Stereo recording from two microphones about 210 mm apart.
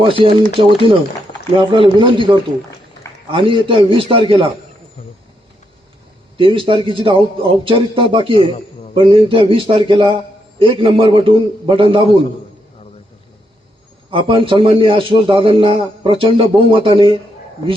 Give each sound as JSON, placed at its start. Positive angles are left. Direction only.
{"t": 0.0, "sound": "a man's voice", "side_deg": -25}
{"t": 6.3, "sound": "a man's voice", "side_deg": -25}
{"t": 14.1, "sound": "a man's voice", "side_deg": -25}